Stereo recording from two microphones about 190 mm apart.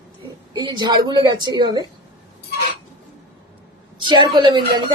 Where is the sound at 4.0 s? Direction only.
25° right (ahead or behind).